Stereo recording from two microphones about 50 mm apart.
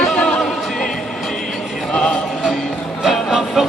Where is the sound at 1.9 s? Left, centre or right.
Centre.